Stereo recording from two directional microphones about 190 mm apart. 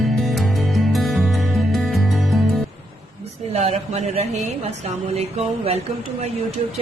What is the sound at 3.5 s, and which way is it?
A man's voice, 35° right (ahead or behind).